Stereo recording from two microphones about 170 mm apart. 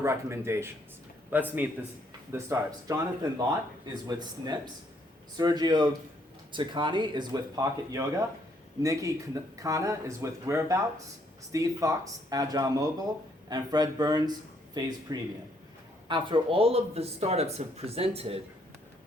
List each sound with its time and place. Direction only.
0.0 s speech: 15° right (ahead or behind); by 18.4 s 35° right (ahead or behind)